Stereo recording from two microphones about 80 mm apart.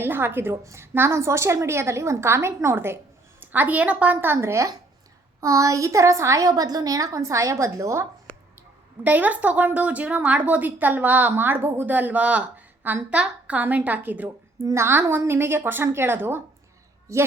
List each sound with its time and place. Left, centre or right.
0.0 s a woman's voice: right
8.3 s a sound: centre
9.0 s a woman's voice: right
14.6 s a woman's voice: right
17.1 s a woman's voice: right